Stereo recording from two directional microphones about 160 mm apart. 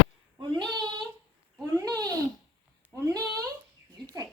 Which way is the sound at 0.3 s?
30° right (ahead or behind).